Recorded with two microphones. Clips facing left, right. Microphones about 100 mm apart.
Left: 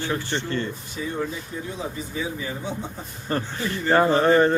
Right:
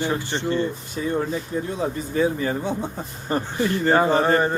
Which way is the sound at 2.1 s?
50° right (ahead or behind).